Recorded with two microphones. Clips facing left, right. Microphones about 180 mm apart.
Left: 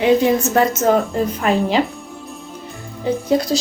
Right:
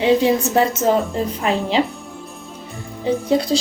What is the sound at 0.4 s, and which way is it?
Speech, 25° right (ahead or behind).